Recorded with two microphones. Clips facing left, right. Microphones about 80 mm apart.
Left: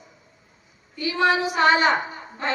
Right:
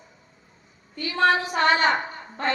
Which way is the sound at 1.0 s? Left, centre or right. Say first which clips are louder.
Even; centre.